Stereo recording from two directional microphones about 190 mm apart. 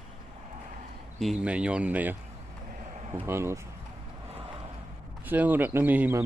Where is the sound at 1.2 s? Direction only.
5° right (ahead or behind).